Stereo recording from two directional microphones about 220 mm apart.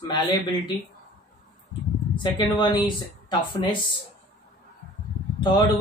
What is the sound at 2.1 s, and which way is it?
Speech, 20° left (ahead or behind).